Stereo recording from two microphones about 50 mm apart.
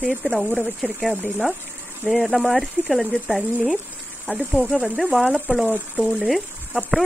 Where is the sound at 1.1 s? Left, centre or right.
Right.